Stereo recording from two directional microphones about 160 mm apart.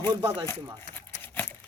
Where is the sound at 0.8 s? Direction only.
10° left (ahead or behind).